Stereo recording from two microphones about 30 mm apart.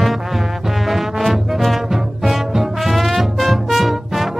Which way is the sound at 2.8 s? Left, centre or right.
Centre.